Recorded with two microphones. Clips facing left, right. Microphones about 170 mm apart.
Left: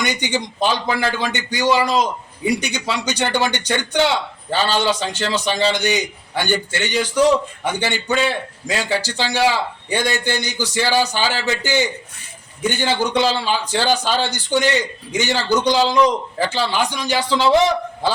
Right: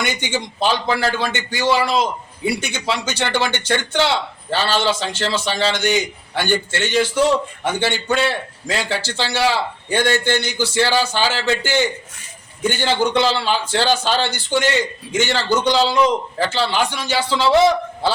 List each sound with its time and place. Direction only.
0.1 s a man's voice: 15° left (ahead or behind)